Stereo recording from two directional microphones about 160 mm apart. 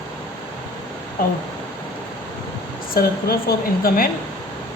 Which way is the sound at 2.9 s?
70° left (ahead or behind).